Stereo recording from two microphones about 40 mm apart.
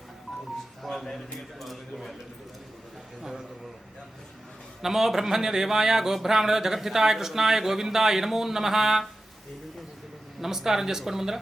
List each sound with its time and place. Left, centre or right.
0.8 s a man's voice: centre
4.8 s speech: centre
10.4 s speech: centre